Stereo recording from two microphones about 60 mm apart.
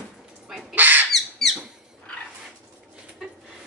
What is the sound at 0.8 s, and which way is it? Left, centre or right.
Bird, right.